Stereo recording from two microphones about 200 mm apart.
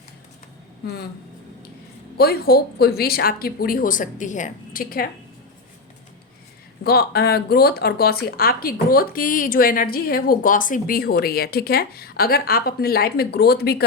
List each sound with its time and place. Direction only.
2.1 s speech: 50° left (ahead or behind)
6.8 s speech: 50° left (ahead or behind)